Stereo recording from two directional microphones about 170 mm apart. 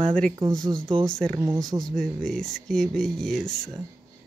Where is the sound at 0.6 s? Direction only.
30° right (ahead or behind).